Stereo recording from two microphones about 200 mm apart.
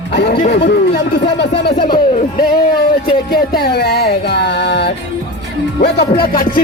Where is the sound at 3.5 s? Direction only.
50° left (ahead or behind).